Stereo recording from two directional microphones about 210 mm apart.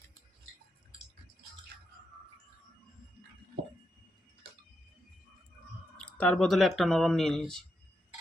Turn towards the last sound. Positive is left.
turn(degrees=0)  # may be behind; listen again after turning